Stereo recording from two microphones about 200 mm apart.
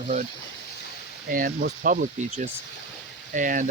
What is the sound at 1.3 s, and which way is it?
Speech, 45° right (ahead or behind).